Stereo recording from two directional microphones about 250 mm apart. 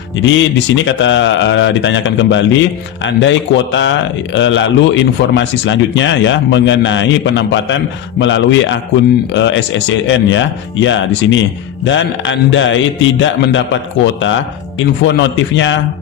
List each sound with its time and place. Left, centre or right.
0.2 s speech: left